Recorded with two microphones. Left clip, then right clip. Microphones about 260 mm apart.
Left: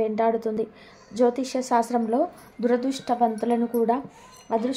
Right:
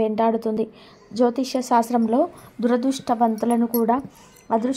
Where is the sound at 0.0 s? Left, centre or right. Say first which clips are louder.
Right 2 dB; right.